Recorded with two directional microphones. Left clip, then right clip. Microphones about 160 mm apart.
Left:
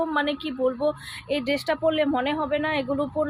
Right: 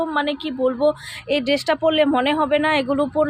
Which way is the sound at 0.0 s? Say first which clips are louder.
Right 3 dB; 20° right (ahead or behind).